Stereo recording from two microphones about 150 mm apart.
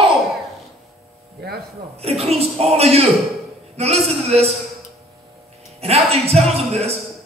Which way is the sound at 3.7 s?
45° right (ahead or behind).